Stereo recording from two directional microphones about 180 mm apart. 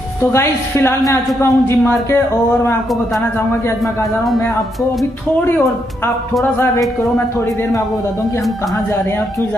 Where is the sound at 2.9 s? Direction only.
Centre (ahead or behind).